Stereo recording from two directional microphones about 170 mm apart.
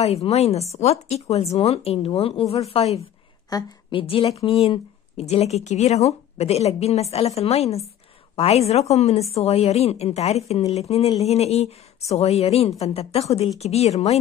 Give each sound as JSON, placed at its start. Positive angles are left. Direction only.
{"t": 0.0, "sound": "a woman's voice", "side_deg": 40}
{"t": 3.4, "sound": "a sound", "side_deg": 20}
{"t": 4.0, "sound": "a woman's voice", "side_deg": 35}